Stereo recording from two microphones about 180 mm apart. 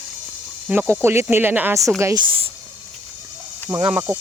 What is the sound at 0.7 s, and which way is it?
Speech, 10° right (ahead or behind).